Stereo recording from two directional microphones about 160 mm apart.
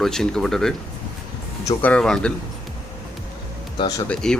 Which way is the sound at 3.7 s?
25° left (ahead or behind).